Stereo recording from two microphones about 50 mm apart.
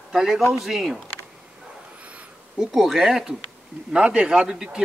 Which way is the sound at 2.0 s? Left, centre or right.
Right.